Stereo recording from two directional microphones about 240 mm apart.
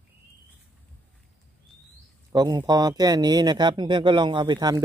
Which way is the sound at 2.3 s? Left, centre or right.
Centre.